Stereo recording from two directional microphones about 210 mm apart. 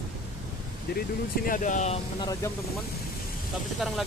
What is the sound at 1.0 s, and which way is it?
Speech, 40° left (ahead or behind).